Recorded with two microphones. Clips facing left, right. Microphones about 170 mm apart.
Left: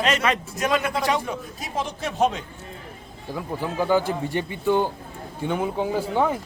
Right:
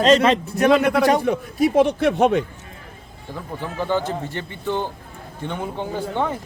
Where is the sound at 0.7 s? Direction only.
50° right (ahead or behind).